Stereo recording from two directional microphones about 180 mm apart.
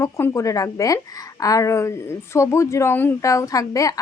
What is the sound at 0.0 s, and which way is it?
A woman's voice, 15° left (ahead or behind).